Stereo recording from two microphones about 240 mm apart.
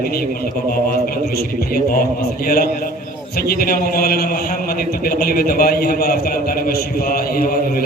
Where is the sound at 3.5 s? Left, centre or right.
Left.